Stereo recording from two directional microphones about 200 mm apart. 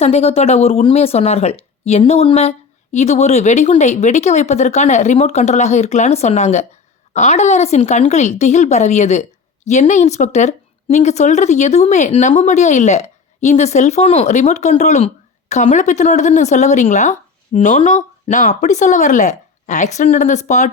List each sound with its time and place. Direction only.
0.0 s speech: 30° left (ahead or behind)